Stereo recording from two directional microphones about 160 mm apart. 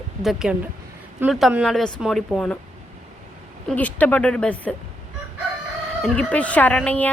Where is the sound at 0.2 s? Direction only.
5° right (ahead or behind).